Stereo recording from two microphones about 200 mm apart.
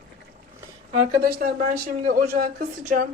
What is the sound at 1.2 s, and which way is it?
A woman's voice, 45° right (ahead or behind).